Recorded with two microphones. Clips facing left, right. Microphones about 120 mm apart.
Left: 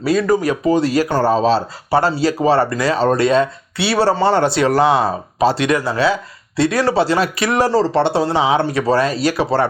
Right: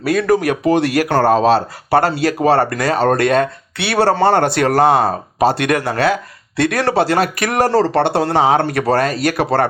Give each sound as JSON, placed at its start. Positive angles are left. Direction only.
{"t": 0.0, "sound": "speech", "side_deg": -60}